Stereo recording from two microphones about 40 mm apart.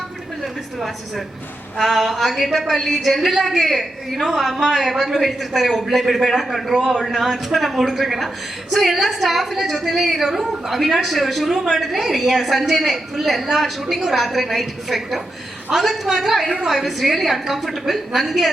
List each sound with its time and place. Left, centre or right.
1.8 s a woman's voice: centre
6.7 s a woman's voice: centre
7.0 s a woman's voice: centre
11.5 s a woman's voice: centre
11.8 s a woman's voice: centre